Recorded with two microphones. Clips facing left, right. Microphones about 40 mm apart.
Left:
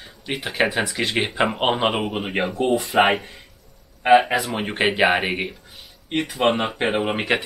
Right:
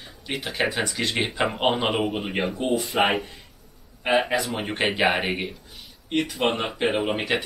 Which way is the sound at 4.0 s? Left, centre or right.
Centre.